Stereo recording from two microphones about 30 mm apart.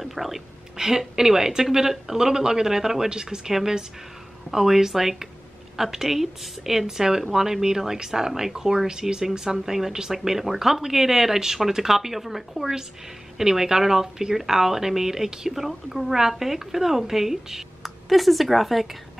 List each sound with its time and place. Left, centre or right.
0.0 s a sound: centre
0.7 s speech: centre
3.1 s speech: right
4.5 s speech: centre
13.4 s speech: centre
15.5 s speech: centre
17.8 s speech: centre